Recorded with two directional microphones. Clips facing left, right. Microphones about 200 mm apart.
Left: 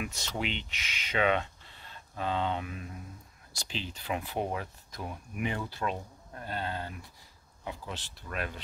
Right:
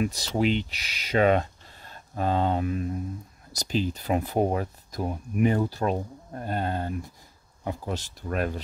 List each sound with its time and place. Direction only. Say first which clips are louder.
0.0 s speech: right 10 dB; 35° right (ahead or behind)